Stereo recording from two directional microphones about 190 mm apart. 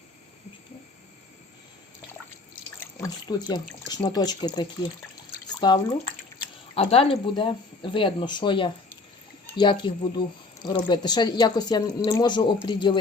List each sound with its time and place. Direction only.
2.8 s speech: 20° left (ahead or behind)